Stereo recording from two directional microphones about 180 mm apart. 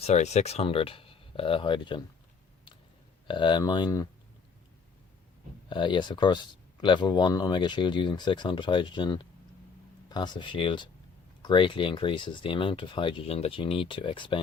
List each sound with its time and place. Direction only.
0.0 s speech: 40° left (ahead or behind)
3.2 s speech: 25° left (ahead or behind)
5.6 s speech: 25° left (ahead or behind)